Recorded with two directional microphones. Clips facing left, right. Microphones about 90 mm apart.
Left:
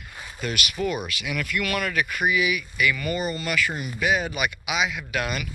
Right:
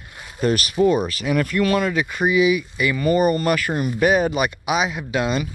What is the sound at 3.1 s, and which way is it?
Speech, 45° right (ahead or behind).